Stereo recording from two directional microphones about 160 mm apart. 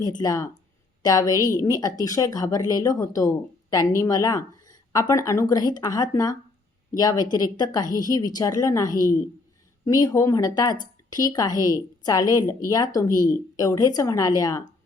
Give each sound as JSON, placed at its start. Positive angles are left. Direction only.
{"t": 0.0, "sound": "speech", "side_deg": 25}